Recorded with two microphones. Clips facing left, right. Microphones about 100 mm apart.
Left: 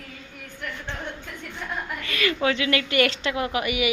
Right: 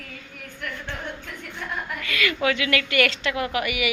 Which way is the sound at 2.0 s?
30° left (ahead or behind).